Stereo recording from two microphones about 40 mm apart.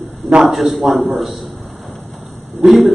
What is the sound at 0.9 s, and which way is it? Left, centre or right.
Speech, centre.